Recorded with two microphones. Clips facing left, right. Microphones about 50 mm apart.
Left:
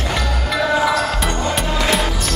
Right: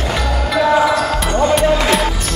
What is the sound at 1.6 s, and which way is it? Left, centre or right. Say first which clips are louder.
Music: right 7 dB; centre.